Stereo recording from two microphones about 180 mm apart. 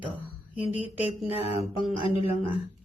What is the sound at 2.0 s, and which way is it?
Speech, 30° left (ahead or behind).